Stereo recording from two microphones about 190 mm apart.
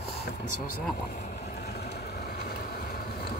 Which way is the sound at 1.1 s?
45° left (ahead or behind).